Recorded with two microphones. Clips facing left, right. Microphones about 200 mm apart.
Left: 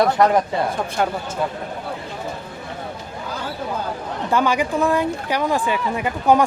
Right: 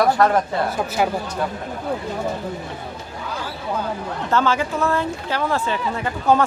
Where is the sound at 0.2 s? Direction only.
20° left (ahead or behind).